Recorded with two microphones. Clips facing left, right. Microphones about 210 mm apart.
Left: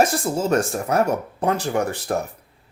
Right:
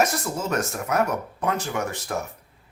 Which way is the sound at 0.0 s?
30° left (ahead or behind).